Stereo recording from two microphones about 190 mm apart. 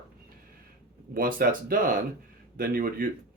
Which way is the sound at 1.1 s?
50° right (ahead or behind).